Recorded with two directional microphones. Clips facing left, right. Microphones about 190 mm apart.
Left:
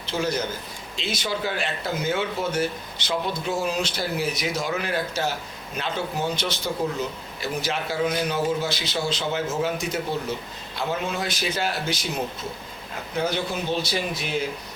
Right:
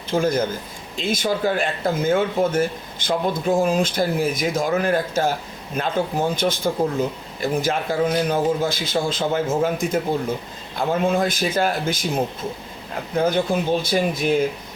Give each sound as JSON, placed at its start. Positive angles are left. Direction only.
{"t": 0.1, "sound": "a man's voice", "side_deg": -50}